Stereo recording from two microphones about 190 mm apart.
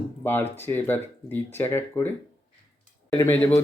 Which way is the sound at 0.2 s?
10° left (ahead or behind).